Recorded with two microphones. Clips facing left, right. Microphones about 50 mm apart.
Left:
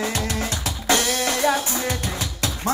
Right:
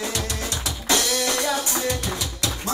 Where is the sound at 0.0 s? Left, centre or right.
Left.